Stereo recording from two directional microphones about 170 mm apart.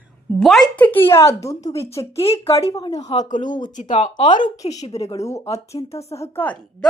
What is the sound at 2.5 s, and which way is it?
Speech, 20° left (ahead or behind).